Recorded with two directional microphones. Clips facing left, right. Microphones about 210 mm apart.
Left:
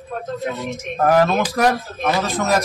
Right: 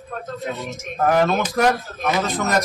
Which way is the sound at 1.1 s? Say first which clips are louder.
Left 2 dB; centre (ahead or behind).